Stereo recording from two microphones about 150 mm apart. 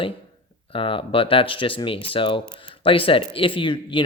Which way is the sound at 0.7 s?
35° left (ahead or behind).